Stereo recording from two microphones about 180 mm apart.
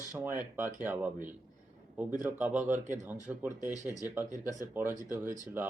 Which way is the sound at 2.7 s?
45° right (ahead or behind).